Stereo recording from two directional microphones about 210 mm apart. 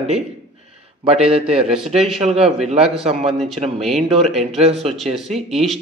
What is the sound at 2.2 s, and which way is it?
Speech, 30° right (ahead or behind).